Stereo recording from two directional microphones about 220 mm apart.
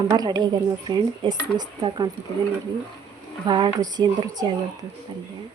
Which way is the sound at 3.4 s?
20° right (ahead or behind).